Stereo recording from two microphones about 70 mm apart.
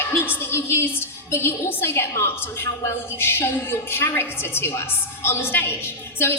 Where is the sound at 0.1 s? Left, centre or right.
Left.